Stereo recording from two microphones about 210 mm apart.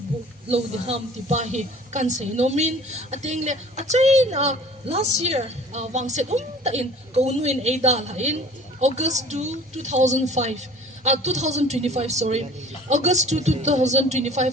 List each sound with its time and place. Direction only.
0.4 s a woman's voice: 30° right (ahead or behind)